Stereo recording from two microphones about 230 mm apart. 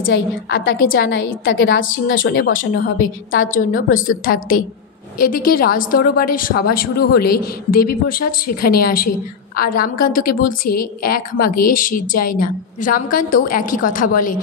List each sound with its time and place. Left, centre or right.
0.1 s a woman's voice: left
2.7 s a woman's voice: left